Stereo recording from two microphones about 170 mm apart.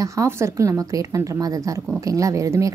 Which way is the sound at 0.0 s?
15° right (ahead or behind).